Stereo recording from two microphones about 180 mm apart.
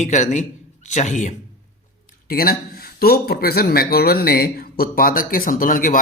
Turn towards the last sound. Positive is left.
turn(degrees=50)  # may be behind; listen again after turning